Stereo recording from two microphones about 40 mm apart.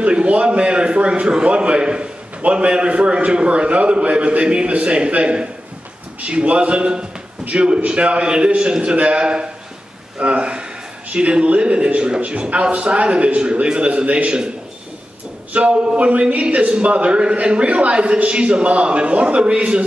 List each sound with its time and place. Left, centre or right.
0.0 s a man's voice: right
15.5 s a man's voice: right